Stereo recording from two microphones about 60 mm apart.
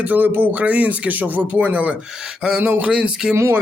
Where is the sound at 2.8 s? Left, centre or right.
Centre.